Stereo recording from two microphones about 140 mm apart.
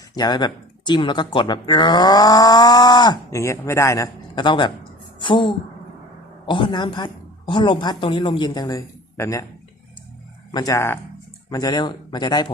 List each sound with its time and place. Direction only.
0.2 s speech: 30° left (ahead or behind)
10.5 s speech: 25° left (ahead or behind)
11.4 s speech: 30° left (ahead or behind)